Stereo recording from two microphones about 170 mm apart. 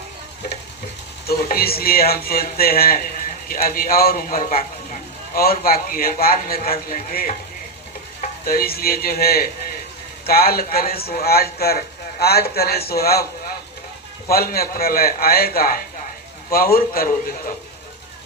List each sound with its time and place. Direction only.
1.3 s a man's voice: 65° left (ahead or behind)
8.4 s a man's voice: 60° left (ahead or behind)
14.3 s a man's voice: 60° left (ahead or behind)